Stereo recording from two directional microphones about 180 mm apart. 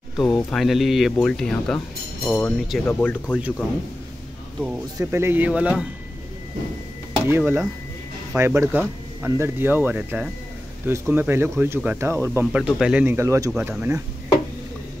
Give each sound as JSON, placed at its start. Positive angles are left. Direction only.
{"t": 0.2, "sound": "speech", "side_deg": 0}
{"t": 4.9, "sound": "speech", "side_deg": -15}
{"t": 7.2, "sound": "speech", "side_deg": -10}
{"t": 12.6, "sound": "speech", "side_deg": -5}